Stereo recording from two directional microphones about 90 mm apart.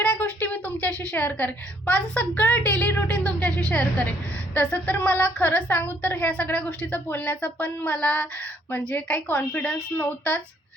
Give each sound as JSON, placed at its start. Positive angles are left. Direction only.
{"t": 0.0, "sound": "a woman's voice", "side_deg": 20}